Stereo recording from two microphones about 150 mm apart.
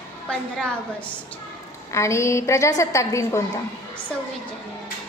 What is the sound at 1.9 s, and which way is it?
A woman's voice, 20° left (ahead or behind).